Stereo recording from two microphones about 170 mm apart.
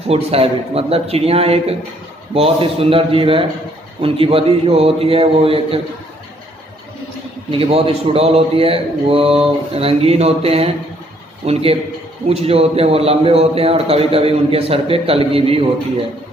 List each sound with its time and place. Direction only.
0.1 s a man's voice: 35° right (ahead or behind)
7.5 s a man's voice: 35° right (ahead or behind)